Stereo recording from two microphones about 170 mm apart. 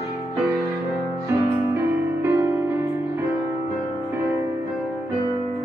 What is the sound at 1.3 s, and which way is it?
Music, 15° right (ahead or behind).